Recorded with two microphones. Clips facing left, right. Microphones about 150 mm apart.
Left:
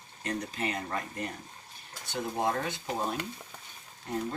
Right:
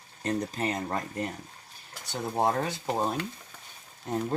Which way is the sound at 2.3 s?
35° right (ahead or behind).